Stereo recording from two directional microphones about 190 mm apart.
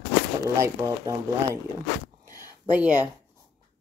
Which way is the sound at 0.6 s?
15° right (ahead or behind).